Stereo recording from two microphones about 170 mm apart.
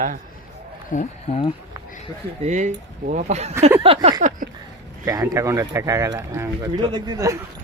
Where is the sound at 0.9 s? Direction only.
50° left (ahead or behind).